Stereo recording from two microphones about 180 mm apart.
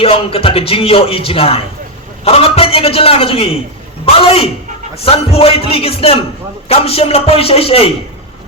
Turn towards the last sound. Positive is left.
turn(degrees=35)  # may be behind; listen again after turning